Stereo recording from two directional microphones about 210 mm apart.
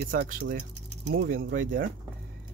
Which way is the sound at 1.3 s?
40° right (ahead or behind).